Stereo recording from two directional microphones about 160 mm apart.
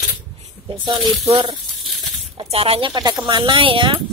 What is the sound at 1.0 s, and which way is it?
Speech, 30° right (ahead or behind).